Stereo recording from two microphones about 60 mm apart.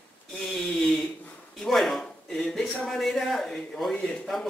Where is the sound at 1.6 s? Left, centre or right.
Centre.